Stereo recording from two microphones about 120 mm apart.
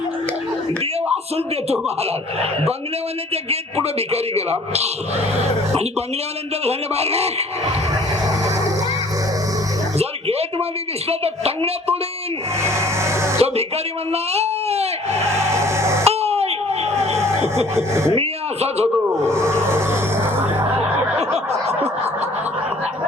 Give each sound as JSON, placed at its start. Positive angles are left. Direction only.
{"t": 3.5, "sound": "a man's voice", "side_deg": -60}
{"t": 6.7, "sound": "a man's voice", "side_deg": -60}
{"t": 10.0, "sound": "music", "side_deg": -60}
{"t": 11.1, "sound": "a man's voice", "side_deg": -55}
{"t": 12.6, "sound": "a sound", "side_deg": -25}
{"t": 14.1, "sound": "speech", "side_deg": -60}
{"t": 15.3, "sound": "music", "side_deg": -25}
{"t": 16.0, "sound": "a sound", "side_deg": -60}
{"t": 17.7, "sound": "speech", "side_deg": -25}
{"t": 18.1, "sound": "a man's voice", "side_deg": -60}
{"t": 19.1, "sound": "a sound", "side_deg": -20}
{"t": 21.2, "sound": "snicker", "side_deg": -60}